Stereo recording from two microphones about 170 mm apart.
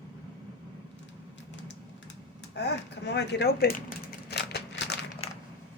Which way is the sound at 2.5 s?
80° left.